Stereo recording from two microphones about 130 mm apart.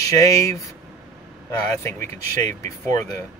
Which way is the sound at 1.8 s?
20° left (ahead or behind).